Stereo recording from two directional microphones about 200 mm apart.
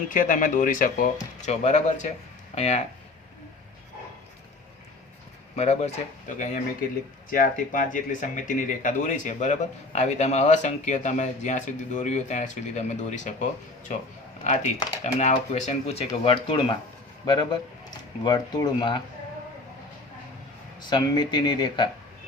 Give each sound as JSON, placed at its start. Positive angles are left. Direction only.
{"t": 0.1, "sound": "speech", "side_deg": 40}
{"t": 5.5, "sound": "speech", "side_deg": 35}
{"t": 20.9, "sound": "speech", "side_deg": 20}